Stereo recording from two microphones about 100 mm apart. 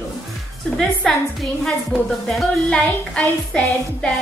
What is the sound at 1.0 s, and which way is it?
Speech, 5° left (ahead or behind).